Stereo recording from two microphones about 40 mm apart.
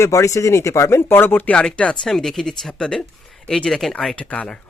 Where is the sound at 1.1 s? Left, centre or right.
Left.